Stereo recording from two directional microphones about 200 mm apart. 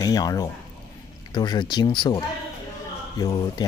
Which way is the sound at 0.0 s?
20° left (ahead or behind).